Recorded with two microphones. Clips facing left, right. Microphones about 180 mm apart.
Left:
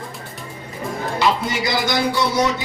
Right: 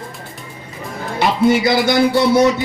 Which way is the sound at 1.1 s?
55° right (ahead or behind).